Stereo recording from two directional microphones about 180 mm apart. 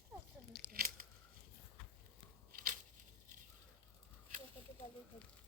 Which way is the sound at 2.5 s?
55° right (ahead or behind).